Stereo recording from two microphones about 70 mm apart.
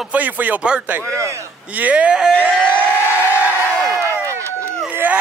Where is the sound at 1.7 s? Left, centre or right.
Right.